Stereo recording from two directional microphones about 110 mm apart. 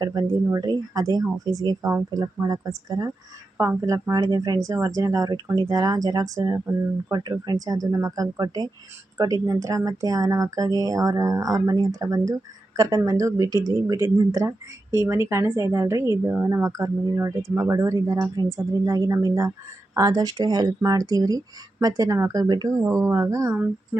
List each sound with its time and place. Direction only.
0.0 s speech: 35° right (ahead or behind)